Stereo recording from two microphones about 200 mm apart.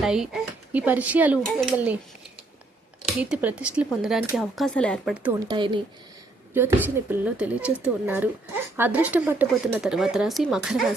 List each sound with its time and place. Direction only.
0.0 s speech: centre (ahead or behind)
3.2 s speech: 5° right (ahead or behind)
5.2 s speech: 15° right (ahead or behind)
6.5 s a woman's voice: 10° right (ahead or behind)